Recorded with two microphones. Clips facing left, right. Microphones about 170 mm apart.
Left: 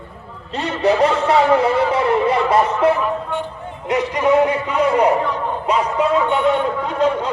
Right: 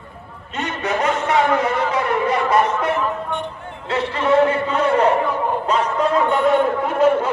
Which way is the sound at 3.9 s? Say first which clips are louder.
Left 2 dB; 15° left (ahead or behind).